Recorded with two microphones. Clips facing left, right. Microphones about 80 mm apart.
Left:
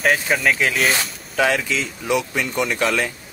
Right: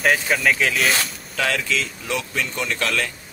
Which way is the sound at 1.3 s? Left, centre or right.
Centre.